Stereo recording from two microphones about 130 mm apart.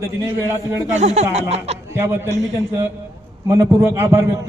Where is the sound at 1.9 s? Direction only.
20° right (ahead or behind).